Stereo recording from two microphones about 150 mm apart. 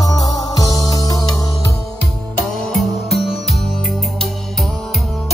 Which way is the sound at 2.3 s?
Centre (ahead or behind).